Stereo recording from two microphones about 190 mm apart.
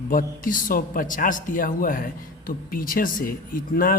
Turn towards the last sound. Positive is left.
turn(degrees=50)  # may be behind; listen again after turning